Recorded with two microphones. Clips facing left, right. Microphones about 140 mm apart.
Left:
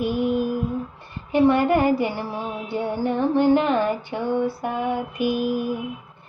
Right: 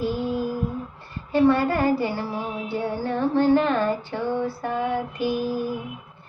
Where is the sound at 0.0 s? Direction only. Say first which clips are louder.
Left 3 dB; 15° left (ahead or behind).